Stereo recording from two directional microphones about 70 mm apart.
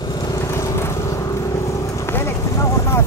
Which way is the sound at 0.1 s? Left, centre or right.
Left.